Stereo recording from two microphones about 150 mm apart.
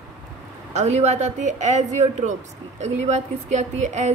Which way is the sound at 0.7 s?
50° right (ahead or behind).